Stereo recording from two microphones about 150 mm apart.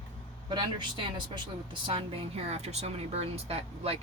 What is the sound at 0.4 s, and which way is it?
Speech, 30° right (ahead or behind).